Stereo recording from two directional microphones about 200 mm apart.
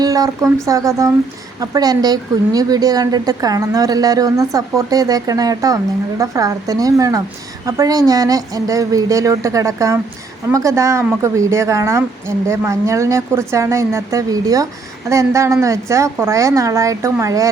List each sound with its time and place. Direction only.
0.0 s a woman's voice: 20° right (ahead or behind)